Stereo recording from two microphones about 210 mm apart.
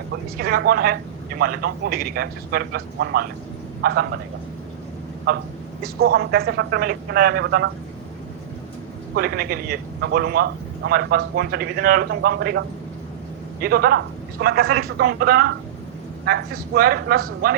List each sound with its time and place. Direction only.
0.3 s a man's voice: 45° right (ahead or behind)
5.3 s a man's voice: 45° right (ahead or behind)
9.1 s a man's voice: 45° right (ahead or behind)